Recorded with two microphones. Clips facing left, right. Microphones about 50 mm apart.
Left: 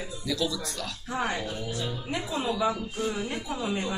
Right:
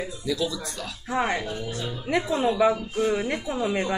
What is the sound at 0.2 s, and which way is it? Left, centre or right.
Speech, centre.